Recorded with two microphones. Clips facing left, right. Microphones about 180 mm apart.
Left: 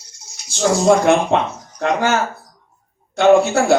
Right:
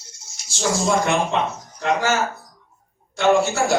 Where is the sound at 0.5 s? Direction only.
60° left (ahead or behind).